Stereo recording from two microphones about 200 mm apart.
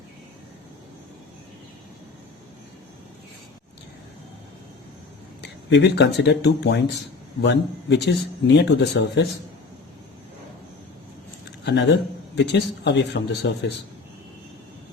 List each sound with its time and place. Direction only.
5.4 s speech: 60° left (ahead or behind)
11.6 s speech: 60° left (ahead or behind)